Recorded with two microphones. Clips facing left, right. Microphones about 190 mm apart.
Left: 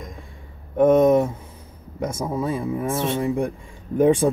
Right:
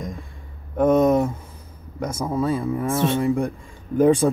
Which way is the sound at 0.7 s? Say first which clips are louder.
Left 2 dB; 25° left (ahead or behind).